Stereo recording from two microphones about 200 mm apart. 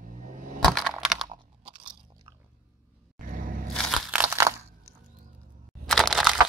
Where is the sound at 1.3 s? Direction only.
25° right (ahead or behind).